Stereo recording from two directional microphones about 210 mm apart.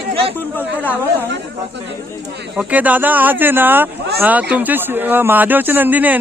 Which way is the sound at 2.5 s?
5° right (ahead or behind).